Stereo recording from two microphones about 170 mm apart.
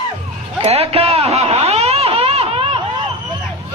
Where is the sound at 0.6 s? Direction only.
35° right (ahead or behind).